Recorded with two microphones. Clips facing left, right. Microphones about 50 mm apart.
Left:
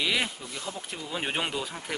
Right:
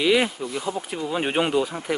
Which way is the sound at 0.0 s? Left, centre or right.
Centre.